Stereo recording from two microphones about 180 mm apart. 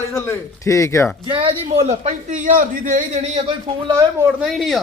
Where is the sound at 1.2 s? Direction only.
30° right (ahead or behind).